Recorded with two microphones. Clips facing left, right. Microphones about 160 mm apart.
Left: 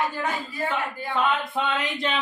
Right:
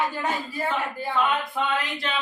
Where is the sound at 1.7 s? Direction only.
20° left (ahead or behind).